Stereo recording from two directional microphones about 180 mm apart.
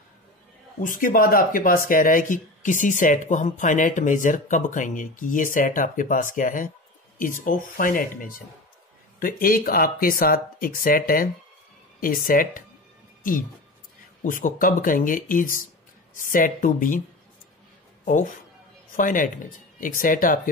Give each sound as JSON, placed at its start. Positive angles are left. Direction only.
{"t": 0.7, "sound": "speech", "side_deg": 50}
{"t": 14.2, "sound": "speech", "side_deg": 50}
{"t": 18.0, "sound": "speech", "side_deg": 50}